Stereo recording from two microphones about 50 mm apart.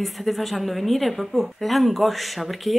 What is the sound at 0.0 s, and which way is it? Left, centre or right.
Speech, centre.